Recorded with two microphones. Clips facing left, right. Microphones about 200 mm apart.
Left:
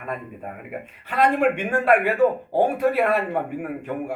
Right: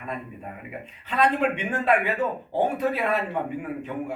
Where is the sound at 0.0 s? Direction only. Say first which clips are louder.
Left 3 dB; 55° left (ahead or behind).